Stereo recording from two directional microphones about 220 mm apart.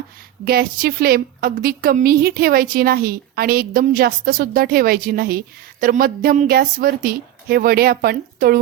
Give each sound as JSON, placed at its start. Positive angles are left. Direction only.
{"t": 0.4, "sound": "a woman's voice", "side_deg": -40}